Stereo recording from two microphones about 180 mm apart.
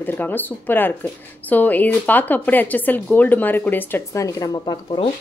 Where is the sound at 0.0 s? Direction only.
10° left (ahead or behind).